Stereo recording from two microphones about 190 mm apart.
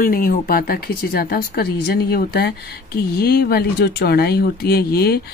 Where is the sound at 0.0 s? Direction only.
45° left (ahead or behind).